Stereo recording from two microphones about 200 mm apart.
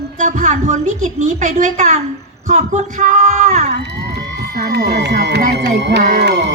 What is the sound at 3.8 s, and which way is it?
Emergency vehicle, 60° right (ahead or behind).